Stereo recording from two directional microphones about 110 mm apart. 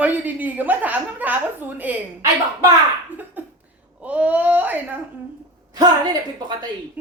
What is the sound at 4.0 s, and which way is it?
Speech, 15° right (ahead or behind).